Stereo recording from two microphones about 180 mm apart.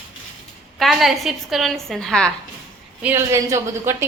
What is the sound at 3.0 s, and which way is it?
A woman's voice, 15° right (ahead or behind).